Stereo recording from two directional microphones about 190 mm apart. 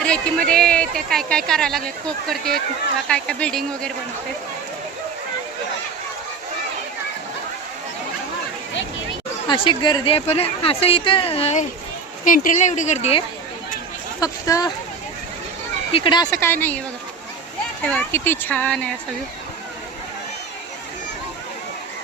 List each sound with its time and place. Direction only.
0.0 s a sound: 5° left (ahead or behind)
0.5 s speech: 5° left (ahead or behind)
3.1 s speech: 5° left (ahead or behind)
9.5 s speech: 25° left (ahead or behind)
12.2 s a woman's voice: 45° left (ahead or behind)
14.2 s speech: 20° left (ahead or behind)
15.9 s speech: 25° left (ahead or behind); by 16.8 s 10° left (ahead or behind)
17.9 s speech: 10° left (ahead or behind)